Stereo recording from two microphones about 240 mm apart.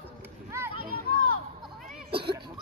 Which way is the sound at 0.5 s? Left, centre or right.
Centre.